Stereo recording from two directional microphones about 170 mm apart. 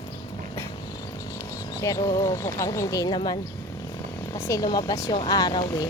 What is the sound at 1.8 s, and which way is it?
Speech, 20° left (ahead or behind).